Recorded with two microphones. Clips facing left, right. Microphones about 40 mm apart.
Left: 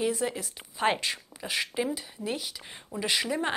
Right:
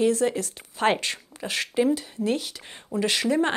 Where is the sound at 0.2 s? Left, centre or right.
Centre.